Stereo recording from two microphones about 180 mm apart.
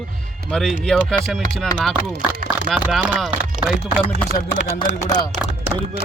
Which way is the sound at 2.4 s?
Centre (ahead or behind).